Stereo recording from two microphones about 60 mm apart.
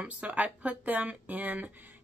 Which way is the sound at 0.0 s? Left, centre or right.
Right.